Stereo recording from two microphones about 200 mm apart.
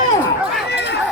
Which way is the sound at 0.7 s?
55° left (ahead or behind).